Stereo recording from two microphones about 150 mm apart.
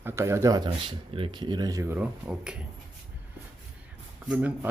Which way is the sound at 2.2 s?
5° right (ahead or behind).